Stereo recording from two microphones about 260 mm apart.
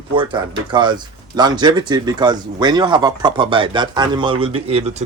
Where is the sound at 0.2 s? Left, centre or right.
Centre.